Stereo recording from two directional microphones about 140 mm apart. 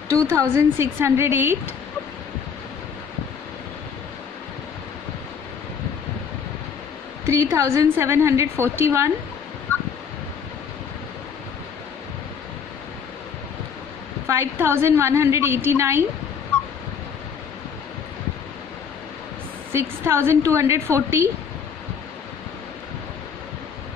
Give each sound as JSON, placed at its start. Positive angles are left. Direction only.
{"t": 0.1, "sound": "a woman's voice", "side_deg": -20}
{"t": 7.2, "sound": "a woman's voice", "side_deg": -20}
{"t": 14.2, "sound": "a woman's voice", "side_deg": -15}
{"t": 19.7, "sound": "a woman's voice", "side_deg": -15}